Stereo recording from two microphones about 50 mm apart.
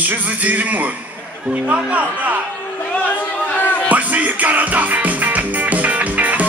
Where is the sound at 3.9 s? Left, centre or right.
Right.